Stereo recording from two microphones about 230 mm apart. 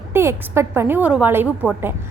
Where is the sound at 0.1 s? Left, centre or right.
Centre.